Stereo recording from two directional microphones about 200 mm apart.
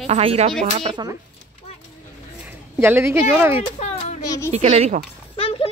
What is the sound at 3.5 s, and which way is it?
Speech, 30° left (ahead or behind).